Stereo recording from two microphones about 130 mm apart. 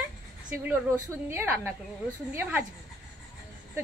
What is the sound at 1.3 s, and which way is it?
Speech, 15° right (ahead or behind).